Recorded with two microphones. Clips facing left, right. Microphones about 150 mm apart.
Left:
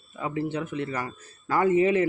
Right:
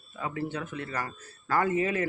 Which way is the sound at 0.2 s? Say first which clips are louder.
Left 4 dB; 20° left (ahead or behind).